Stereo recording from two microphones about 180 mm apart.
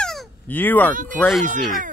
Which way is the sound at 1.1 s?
10° left (ahead or behind).